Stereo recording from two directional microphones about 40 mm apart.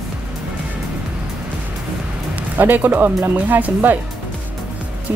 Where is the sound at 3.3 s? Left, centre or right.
Right.